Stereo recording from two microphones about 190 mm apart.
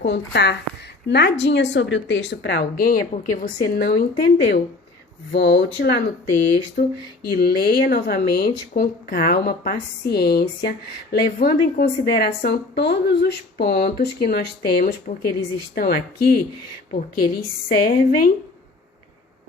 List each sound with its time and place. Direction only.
0.0 s speech: 65° left (ahead or behind)